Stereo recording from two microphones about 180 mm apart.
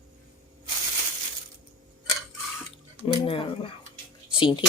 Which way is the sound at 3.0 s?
30° left (ahead or behind).